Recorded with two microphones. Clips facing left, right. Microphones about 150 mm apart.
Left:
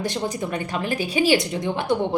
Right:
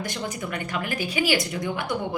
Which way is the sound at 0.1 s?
25° left (ahead or behind).